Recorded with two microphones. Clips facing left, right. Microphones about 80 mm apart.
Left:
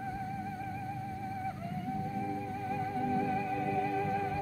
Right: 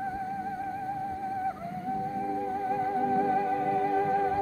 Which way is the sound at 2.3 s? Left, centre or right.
Right.